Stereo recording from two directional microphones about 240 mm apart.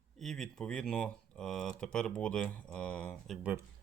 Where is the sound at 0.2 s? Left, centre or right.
Centre.